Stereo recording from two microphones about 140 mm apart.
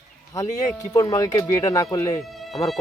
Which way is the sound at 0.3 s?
25° left (ahead or behind).